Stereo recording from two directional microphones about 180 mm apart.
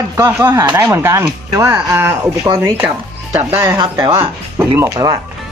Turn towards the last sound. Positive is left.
turn(degrees=-20)  # may be behind; listen again after turning